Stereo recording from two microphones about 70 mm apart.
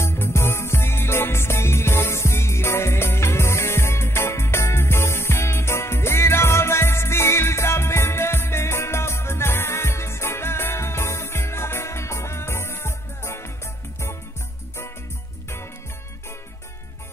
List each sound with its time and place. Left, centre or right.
0.0 s music: left